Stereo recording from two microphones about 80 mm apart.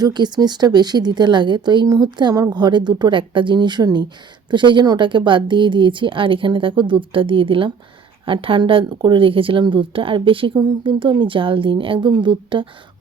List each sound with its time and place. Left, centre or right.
0.0 s a woman's voice: right
4.5 s speech: right